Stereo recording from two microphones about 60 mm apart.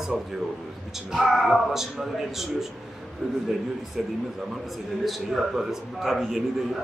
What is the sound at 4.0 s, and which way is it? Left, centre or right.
A man's voice, centre.